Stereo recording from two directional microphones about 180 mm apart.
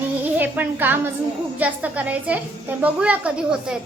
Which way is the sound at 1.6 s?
10° right (ahead or behind).